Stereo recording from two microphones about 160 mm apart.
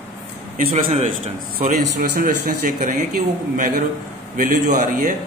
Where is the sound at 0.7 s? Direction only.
45° right (ahead or behind).